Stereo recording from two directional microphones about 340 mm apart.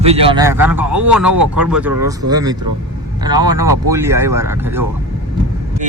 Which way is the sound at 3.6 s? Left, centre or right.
Right.